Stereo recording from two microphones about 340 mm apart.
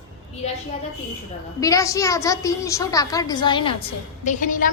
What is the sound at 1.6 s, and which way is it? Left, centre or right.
A woman's voice, centre.